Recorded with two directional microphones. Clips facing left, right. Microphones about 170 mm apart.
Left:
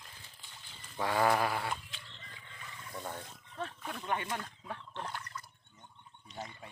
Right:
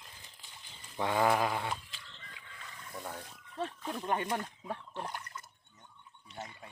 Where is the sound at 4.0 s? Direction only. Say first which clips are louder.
Right 3 dB; 40° right (ahead or behind).